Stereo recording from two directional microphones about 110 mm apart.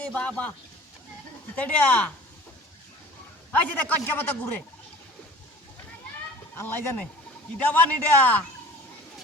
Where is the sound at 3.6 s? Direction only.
15° left (ahead or behind).